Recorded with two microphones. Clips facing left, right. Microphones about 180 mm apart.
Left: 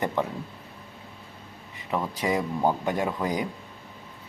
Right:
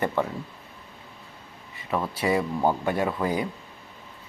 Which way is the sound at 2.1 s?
15° left (ahead or behind).